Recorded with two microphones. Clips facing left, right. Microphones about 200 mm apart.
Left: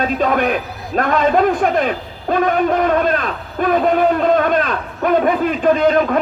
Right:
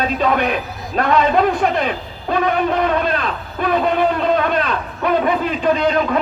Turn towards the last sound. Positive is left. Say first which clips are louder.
# left 3 dB
turn(degrees=50)  # may be behind; listen again after turning